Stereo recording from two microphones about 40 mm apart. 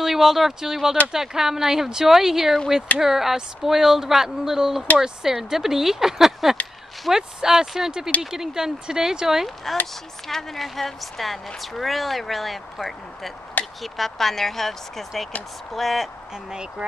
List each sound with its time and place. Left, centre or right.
0.0 s speech: centre
10.2 s a woman's voice: centre
13.6 s a sound: left
13.9 s a woman's voice: centre